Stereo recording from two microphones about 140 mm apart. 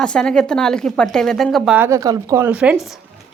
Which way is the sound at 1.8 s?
20° right (ahead or behind).